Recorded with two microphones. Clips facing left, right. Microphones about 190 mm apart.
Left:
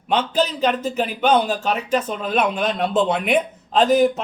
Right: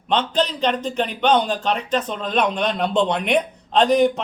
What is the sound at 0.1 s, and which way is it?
A man's voice, 5° left (ahead or behind).